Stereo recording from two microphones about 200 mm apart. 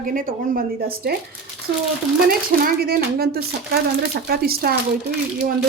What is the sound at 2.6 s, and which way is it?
Speech, 50° right (ahead or behind).